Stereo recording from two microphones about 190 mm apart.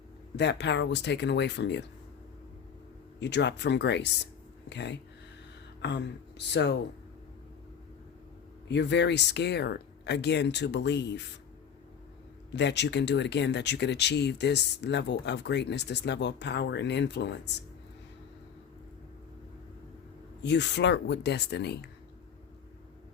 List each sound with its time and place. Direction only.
0.3 s speech: 65° left (ahead or behind)
3.2 s speech: 65° left (ahead or behind)
8.7 s speech: 65° left (ahead or behind)
12.5 s speech: 65° left (ahead or behind)
20.4 s speech: 65° left (ahead or behind)